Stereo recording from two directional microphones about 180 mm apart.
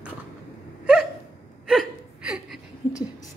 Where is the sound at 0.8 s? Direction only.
5° right (ahead or behind).